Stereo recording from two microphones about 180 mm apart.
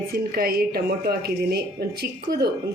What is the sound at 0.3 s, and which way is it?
Speech, 55° right (ahead or behind).